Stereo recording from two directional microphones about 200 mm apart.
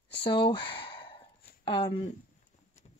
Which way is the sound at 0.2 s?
25° left (ahead or behind).